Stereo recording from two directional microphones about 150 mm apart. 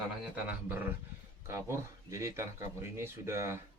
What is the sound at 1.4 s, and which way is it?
Speech, 20° right (ahead or behind).